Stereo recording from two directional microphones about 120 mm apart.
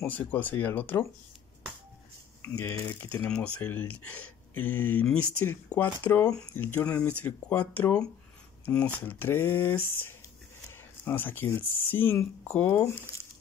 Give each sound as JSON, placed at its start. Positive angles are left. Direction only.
{"t": 0.0, "sound": "speech", "side_deg": 15}
{"t": 2.9, "sound": "speech", "side_deg": 15}